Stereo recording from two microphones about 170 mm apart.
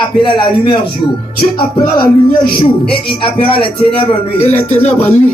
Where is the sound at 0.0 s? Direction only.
30° left (ahead or behind).